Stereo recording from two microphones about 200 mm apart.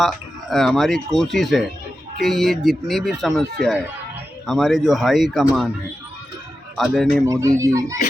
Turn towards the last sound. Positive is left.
turn(degrees=-15)  # may be behind; listen again after turning